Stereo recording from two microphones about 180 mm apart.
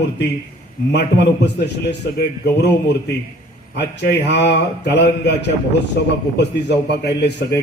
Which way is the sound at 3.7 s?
70° left (ahead or behind).